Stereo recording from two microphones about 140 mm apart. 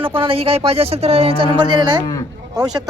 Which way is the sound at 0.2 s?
40° right (ahead or behind).